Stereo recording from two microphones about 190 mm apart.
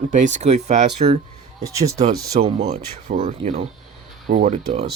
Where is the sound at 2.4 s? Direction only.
35° right (ahead or behind).